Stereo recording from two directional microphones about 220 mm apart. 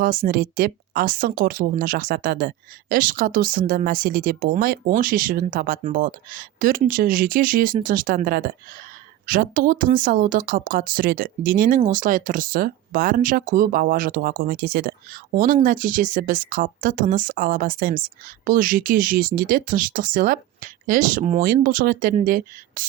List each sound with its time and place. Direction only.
0.0 s speech: 40° right (ahead or behind)